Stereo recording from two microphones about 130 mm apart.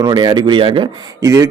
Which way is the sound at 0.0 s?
35° right (ahead or behind).